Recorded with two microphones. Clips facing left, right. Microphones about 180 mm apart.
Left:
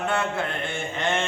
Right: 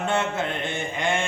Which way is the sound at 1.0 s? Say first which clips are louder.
Even; 10° right (ahead or behind).